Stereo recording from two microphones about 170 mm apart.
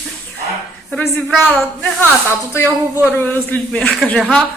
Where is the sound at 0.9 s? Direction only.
15° left (ahead or behind).